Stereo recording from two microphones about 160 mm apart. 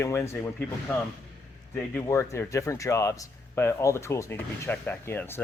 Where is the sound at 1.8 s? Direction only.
15° left (ahead or behind).